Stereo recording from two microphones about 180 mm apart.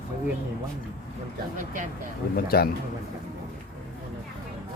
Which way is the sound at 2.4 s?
60° left (ahead or behind).